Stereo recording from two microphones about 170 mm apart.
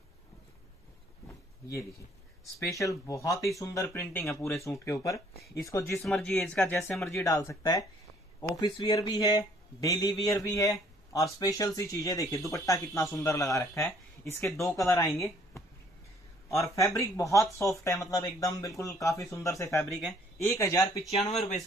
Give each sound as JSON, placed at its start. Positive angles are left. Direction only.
{"t": 1.2, "sound": "a sound", "side_deg": 15}
{"t": 2.7, "sound": "speech", "side_deg": 20}
{"t": 6.0, "sound": "speech", "side_deg": 5}
{"t": 15.0, "sound": "speech", "side_deg": 0}
{"t": 16.4, "sound": "speech", "side_deg": 20}
{"t": 21.0, "sound": "speech", "side_deg": 0}
{"t": 21.3, "sound": "speech", "side_deg": 40}